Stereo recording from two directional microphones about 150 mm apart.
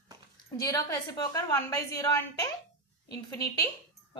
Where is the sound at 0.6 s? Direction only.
25° left (ahead or behind).